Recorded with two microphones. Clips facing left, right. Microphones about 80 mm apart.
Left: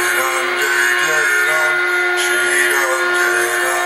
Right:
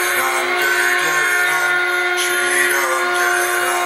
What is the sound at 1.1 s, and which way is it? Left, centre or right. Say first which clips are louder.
Music: left 2 dB; left.